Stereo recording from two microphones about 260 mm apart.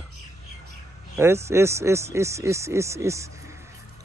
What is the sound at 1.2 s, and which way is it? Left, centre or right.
Speech, centre.